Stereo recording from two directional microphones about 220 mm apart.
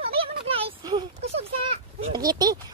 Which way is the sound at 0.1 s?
25° right (ahead or behind).